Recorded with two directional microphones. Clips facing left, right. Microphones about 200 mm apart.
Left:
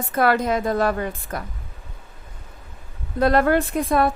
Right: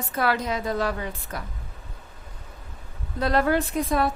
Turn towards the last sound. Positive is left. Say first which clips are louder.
# left 4 dB
turn(degrees=55)  # may be behind; listen again after turning